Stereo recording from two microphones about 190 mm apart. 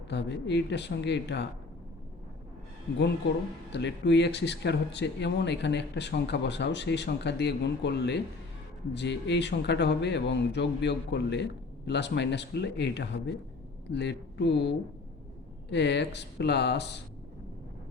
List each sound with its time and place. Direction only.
0.1 s speech: 65° left (ahead or behind)
3.7 s speech: 65° left (ahead or behind)
15.7 s speech: 65° left (ahead or behind)